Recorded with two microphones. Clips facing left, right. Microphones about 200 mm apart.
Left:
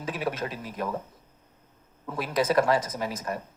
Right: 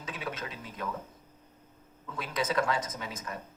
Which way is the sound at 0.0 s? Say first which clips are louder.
Left 8 dB; 60° left (ahead or behind).